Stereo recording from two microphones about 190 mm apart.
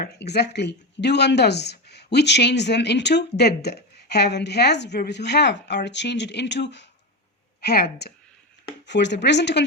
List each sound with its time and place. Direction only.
0.0 s speech: 60° left (ahead or behind)